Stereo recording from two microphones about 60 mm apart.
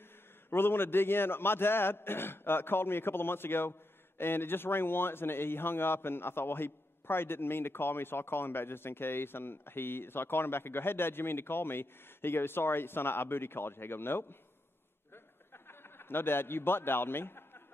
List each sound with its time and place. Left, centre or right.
0.5 s a man's voice: left
15.5 s a man's voice: left